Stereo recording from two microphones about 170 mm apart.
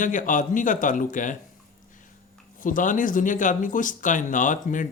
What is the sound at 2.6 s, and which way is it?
Speech, 50° left (ahead or behind).